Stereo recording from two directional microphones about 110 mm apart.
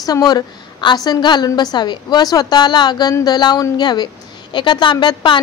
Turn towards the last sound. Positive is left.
turn(degrees=45)  # may be behind; listen again after turning